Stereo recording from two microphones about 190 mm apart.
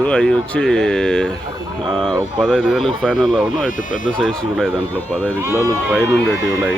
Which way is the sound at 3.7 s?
45° left (ahead or behind).